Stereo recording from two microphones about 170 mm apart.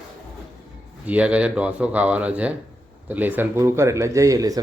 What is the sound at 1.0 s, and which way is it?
Speech, 10° right (ahead or behind).